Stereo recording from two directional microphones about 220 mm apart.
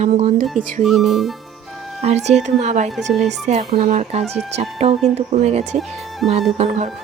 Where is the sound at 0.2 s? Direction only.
30° right (ahead or behind).